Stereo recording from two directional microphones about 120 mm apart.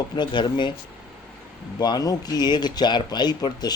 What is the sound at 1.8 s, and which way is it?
Speech, 35° left (ahead or behind).